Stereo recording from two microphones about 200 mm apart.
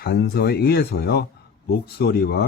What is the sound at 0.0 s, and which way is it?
Speech, 55° left (ahead or behind).